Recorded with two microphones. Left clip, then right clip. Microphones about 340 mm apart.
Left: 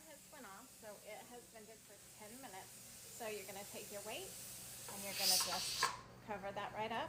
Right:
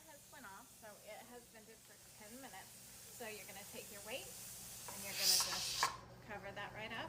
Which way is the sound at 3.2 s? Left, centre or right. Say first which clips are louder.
Left 4 dB; centre.